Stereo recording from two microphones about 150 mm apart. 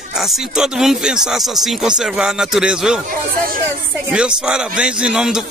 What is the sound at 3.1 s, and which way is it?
Speech, 70° right (ahead or behind).